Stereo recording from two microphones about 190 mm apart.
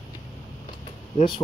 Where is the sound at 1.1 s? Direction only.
25° left (ahead or behind).